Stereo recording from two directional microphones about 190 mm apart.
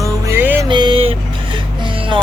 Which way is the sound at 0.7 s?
25° right (ahead or behind).